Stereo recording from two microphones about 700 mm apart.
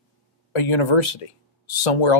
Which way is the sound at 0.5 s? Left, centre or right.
Left.